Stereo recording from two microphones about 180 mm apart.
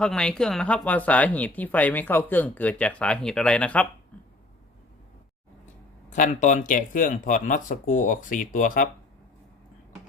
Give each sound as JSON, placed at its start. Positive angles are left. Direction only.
{"t": 0.0, "sound": "speech", "side_deg": 5}
{"t": 6.1, "sound": "speech", "side_deg": 45}